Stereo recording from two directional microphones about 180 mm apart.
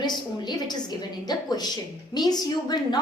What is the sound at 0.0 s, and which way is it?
A woman's voice, 25° left (ahead or behind).